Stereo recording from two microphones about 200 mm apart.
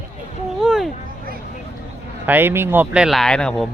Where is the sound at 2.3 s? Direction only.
10° right (ahead or behind).